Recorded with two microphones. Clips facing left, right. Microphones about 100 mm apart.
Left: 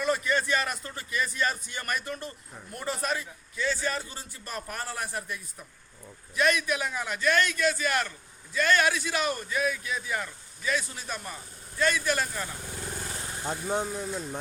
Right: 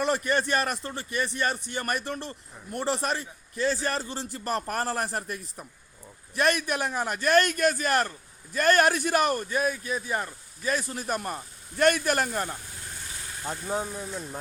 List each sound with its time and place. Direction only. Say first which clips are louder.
0.7 s a man's voice: right 3 dB; 35° right (ahead or behind)
3.5 s a man's voice: right 3 dB; 40° right (ahead or behind)
4.4 s a man's voice: right 7 dB; 55° right (ahead or behind)
13.5 s speech: left 1 dB; centre (ahead or behind)